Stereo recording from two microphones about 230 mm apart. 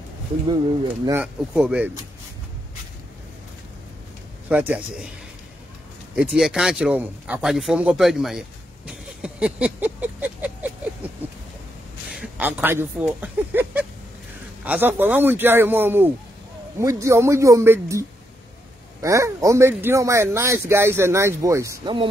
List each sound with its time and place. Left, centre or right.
0.5 s speech: centre
1.2 s speech: centre
4.5 s speech: centre
6.1 s speech: centre
11.2 s a sound: centre
12.1 s speech: centre